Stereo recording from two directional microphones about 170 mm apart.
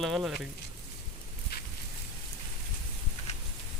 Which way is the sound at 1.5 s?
65° left (ahead or behind).